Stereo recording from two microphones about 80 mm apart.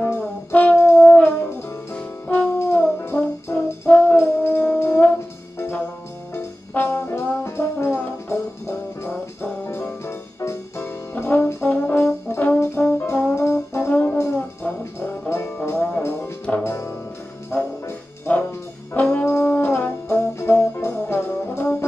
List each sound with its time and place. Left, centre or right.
0.0 s brass instrument: left
1.0 s music: left
2.6 s brass instrument: left
3.6 s music: left
6.3 s brass instrument: left
7.4 s music: left
12.5 s brass instrument: left
14.1 s music: left
17.5 s trombone: left
18.9 s brass instrument: left